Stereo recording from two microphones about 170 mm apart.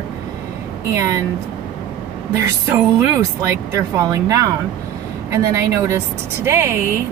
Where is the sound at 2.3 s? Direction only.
15° right (ahead or behind).